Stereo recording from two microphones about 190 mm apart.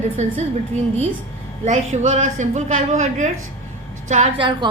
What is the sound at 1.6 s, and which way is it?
A woman's voice, 40° right (ahead or behind).